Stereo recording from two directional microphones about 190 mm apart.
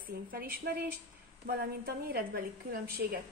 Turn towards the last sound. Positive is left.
turn(degrees=-50)  # may be behind; listen again after turning